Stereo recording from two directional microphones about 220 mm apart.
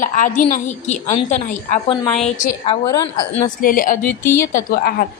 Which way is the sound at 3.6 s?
40° left (ahead or behind).